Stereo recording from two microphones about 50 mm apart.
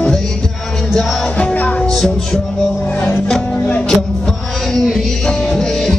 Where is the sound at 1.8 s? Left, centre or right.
Centre.